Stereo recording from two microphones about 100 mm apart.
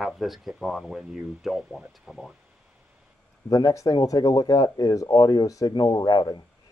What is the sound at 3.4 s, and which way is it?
Speech, 40° left (ahead or behind).